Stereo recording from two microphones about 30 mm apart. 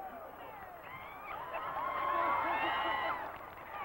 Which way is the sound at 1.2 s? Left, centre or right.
Centre.